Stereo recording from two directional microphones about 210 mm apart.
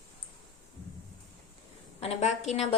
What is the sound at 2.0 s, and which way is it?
Speech, 30° left (ahead or behind).